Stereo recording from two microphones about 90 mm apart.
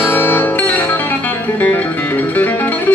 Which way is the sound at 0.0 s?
25° left (ahead or behind).